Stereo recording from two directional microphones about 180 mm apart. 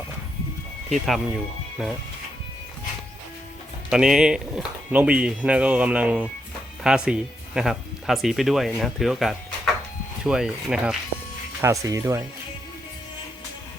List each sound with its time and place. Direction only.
0.9 s speech: centre (ahead or behind)
3.8 s speech: 5° right (ahead or behind)
11.6 s speech: 20° right (ahead or behind)